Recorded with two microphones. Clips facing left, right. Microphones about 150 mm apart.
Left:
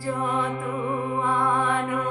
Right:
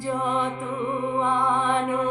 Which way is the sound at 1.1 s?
20° right (ahead or behind).